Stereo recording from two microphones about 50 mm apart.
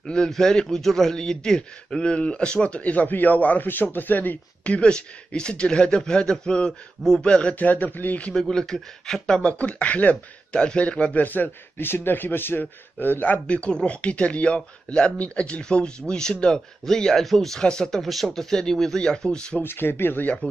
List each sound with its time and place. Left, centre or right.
0.0 s a man's voice: centre; by 4.7 s left
4.7 s a man's voice: centre
7.5 s a man's voice: left
8.3 s speech: centre
9.5 s a man's voice: left
13.5 s a man's voice: left; by 17.6 s centre
17.6 s speech: centre
18.0 s speech: centre
19.6 s speech: left